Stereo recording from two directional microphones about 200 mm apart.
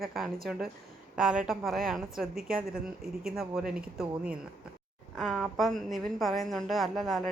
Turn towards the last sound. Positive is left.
turn(degrees=0)  # may be behind; listen again after turning